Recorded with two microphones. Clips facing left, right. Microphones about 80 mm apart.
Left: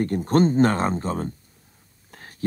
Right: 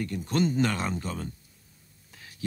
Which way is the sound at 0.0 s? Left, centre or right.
Left.